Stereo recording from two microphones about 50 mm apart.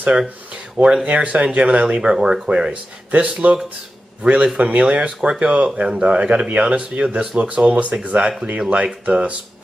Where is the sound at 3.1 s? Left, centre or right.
Right.